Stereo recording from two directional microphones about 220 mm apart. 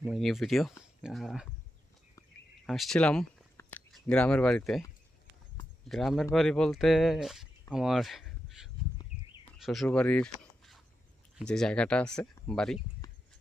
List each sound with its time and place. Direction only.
0.0 s speech: centre (ahead or behind)
2.6 s speech: centre (ahead or behind)
5.9 s speech: centre (ahead or behind)
7.7 s a sound: centre (ahead or behind)
9.6 s speech: centre (ahead or behind)
11.3 s speech: centre (ahead or behind)